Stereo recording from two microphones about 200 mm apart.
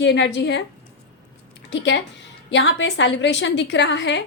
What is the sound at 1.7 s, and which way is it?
A woman's voice, 65° left (ahead or behind).